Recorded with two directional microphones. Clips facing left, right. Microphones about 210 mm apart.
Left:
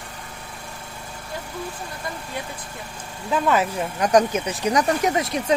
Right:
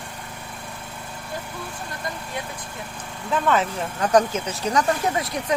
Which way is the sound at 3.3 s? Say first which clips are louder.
Left 1 dB; 10° left (ahead or behind).